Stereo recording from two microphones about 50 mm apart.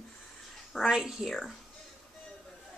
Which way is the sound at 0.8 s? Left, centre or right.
Centre.